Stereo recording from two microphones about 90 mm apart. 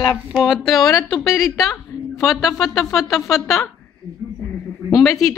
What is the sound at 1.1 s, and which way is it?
Speech, 35° left (ahead or behind).